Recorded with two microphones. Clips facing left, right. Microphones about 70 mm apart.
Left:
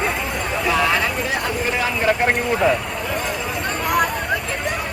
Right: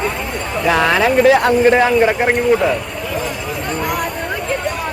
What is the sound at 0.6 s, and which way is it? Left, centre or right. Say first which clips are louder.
Speech: right 6 dB; right.